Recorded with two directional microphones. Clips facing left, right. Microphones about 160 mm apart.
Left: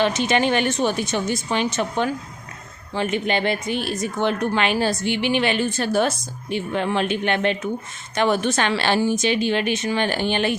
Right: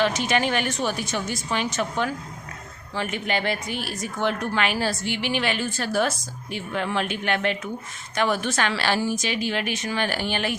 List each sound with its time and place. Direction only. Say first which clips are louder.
0.0 s speech: left 3 dB; 25° left (ahead or behind)